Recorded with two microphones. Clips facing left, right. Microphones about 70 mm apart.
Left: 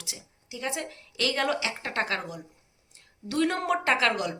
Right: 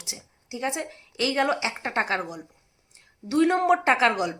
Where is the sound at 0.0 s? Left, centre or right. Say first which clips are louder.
Right 2 dB; right.